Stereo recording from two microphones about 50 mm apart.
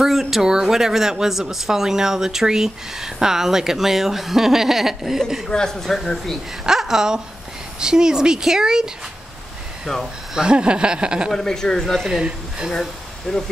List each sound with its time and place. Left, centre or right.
0.0 s speech: centre
5.5 s speech: centre
6.6 s a woman's voice: centre
10.3 s speech: centre
11.3 s speech: centre
12.1 s speech: centre
13.3 s speech: centre